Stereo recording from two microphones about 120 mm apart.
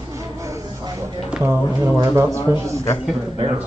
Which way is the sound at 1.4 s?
15° right (ahead or behind).